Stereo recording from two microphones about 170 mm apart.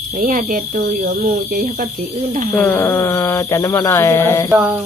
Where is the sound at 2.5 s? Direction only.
10° left (ahead or behind).